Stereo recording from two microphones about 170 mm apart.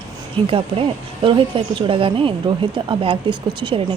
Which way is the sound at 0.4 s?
30° right (ahead or behind).